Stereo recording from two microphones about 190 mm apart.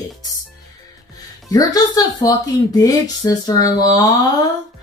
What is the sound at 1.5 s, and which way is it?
Speech, 20° left (ahead or behind).